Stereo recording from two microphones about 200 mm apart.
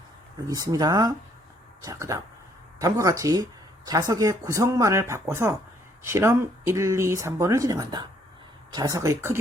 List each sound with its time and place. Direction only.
0.4 s speech: 15° right (ahead or behind)